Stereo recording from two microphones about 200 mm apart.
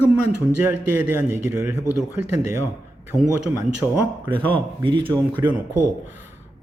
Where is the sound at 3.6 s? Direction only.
15° right (ahead or behind).